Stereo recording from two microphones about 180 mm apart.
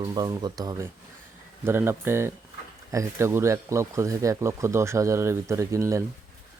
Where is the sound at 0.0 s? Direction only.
25° right (ahead or behind).